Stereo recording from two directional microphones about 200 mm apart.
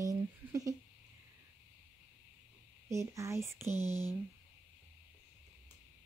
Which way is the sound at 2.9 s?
15° right (ahead or behind).